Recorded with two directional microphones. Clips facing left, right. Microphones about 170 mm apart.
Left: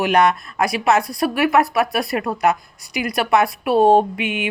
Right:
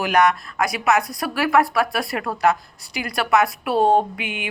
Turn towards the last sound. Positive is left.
turn(degrees=25)  # may be behind; listen again after turning